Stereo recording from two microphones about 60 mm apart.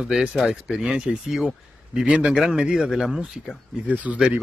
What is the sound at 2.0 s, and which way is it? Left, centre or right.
Speech, right.